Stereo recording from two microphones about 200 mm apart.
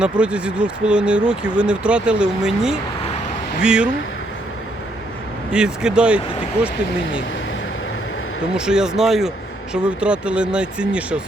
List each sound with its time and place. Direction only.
0.0 s speech: 5° right (ahead or behind)
5.5 s speech: 5° right (ahead or behind)
8.5 s speech: 5° right (ahead or behind)